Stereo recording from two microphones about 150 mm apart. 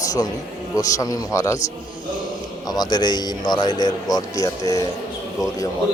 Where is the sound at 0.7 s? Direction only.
25° left (ahead or behind).